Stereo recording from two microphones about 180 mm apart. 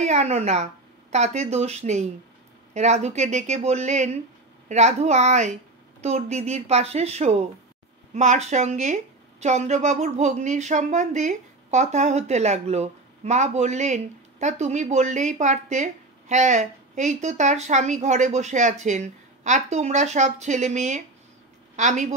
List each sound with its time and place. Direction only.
0.0 s a woman's voice: 40° right (ahead or behind)